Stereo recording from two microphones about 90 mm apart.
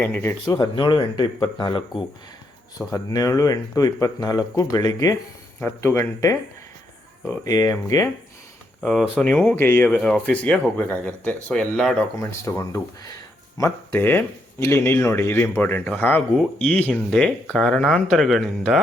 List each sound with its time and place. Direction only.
0.0 s speech: 25° left (ahead or behind)
0.4 s speech: 40° left (ahead or behind)
0.8 s speech: 65° left (ahead or behind)
2.7 s speech: 45° left (ahead or behind)
5.5 s speech: 25° left (ahead or behind)
7.4 s speech: 40° left (ahead or behind)
8.8 s speech: 5° left (ahead or behind)
9.1 s speech: 15° left (ahead or behind)
9.9 s speech: 10° left (ahead or behind)
12.2 s speech: 35° left (ahead or behind)
13.7 s speech: 20° left (ahead or behind); by 18.8 s centre (ahead or behind)